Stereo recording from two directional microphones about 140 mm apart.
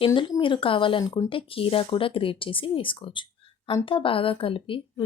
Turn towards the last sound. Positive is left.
turn(degrees=40)  # may be behind; listen again after turning